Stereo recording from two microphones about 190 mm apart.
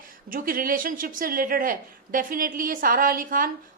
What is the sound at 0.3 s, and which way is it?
A woman's voice, 50° right (ahead or behind).